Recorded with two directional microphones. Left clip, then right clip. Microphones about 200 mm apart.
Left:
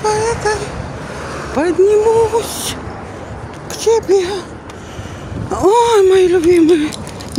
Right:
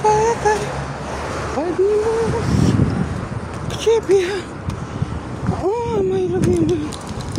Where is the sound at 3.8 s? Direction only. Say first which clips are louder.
Left 3 dB; 15° left (ahead or behind).